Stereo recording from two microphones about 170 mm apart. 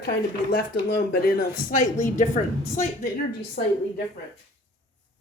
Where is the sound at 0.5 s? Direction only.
70° left (ahead or behind).